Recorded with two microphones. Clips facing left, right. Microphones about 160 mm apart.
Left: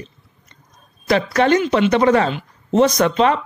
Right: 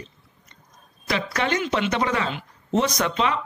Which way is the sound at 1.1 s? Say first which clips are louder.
Left 9 dB; 45° left (ahead or behind).